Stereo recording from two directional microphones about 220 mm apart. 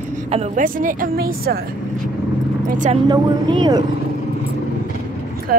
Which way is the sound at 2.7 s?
35° right (ahead or behind).